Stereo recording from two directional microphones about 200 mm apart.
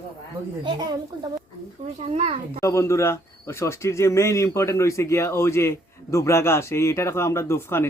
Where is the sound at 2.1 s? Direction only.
35° right (ahead or behind).